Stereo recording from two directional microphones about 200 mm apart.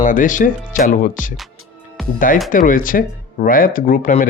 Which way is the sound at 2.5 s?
40° left (ahead or behind).